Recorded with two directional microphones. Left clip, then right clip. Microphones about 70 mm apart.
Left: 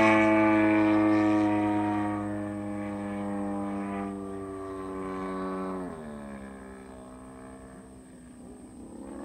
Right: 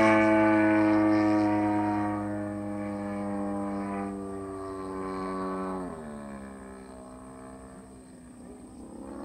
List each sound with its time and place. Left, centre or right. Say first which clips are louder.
0.0 s music: even; centre
4.9 s music: right 1 dB; centre